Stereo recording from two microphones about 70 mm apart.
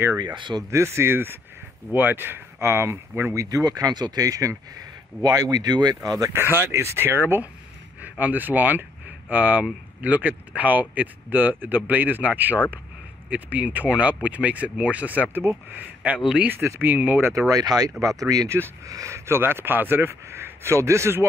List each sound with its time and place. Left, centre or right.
0.2 s speech: right
0.7 s speech: right
3.3 s speech: right
6.0 s speech: right
6.3 s speech: right
17.3 s speech: right
18.9 s speech: right